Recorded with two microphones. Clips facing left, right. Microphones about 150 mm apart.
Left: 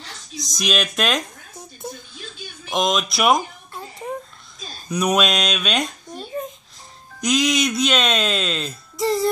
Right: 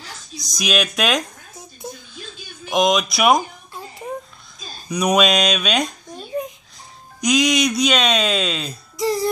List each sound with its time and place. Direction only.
0.6 s speech: centre (ahead or behind)
2.7 s speech: centre (ahead or behind)
4.8 s speech: centre (ahead or behind)
7.2 s speech: centre (ahead or behind)